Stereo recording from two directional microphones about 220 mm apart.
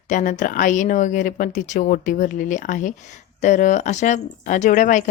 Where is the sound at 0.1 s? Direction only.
35° left (ahead or behind).